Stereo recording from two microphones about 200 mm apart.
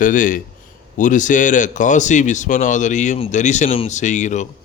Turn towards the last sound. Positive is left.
turn(degrees=35)  # may be behind; listen again after turning